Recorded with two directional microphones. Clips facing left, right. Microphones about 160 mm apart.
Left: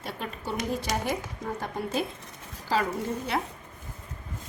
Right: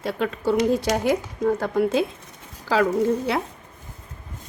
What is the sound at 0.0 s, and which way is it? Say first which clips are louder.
A woman's voice: right 11 dB; 90° right.